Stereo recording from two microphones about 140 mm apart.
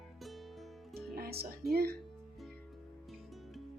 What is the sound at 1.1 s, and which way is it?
Speech, 90° right.